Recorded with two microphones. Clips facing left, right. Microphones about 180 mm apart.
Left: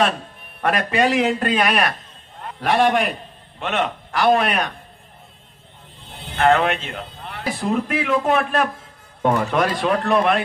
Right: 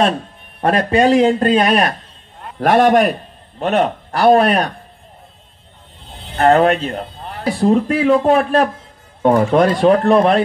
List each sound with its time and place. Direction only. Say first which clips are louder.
0.6 s speech: right 5 dB; 35° right (ahead or behind)
2.6 s a man's voice: right 6 dB; 45° right (ahead or behind)
6.3 s speech: right 5 dB; 35° right (ahead or behind)